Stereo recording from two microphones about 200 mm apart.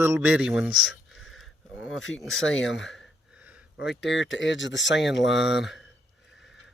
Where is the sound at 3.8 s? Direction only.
60° left (ahead or behind).